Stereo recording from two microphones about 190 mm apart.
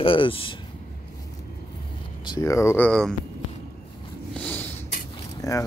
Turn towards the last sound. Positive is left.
turn(degrees=20)  # may be behind; listen again after turning